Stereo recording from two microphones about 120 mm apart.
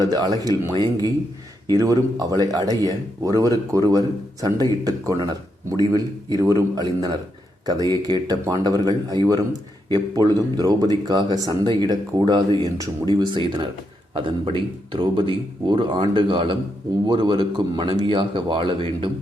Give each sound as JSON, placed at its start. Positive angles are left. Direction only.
{"t": 0.0, "sound": "a man's voice", "side_deg": -35}